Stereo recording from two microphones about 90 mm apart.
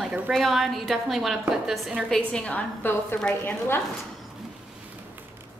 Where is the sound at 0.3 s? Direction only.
Centre (ahead or behind).